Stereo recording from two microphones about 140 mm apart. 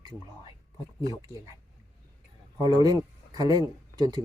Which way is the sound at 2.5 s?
30° left (ahead or behind).